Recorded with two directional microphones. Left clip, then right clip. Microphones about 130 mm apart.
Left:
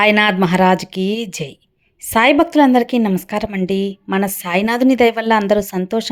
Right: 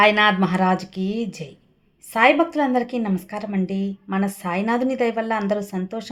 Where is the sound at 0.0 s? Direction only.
50° left (ahead or behind).